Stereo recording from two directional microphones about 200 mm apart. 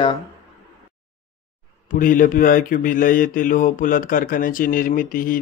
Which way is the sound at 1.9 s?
45° left (ahead or behind).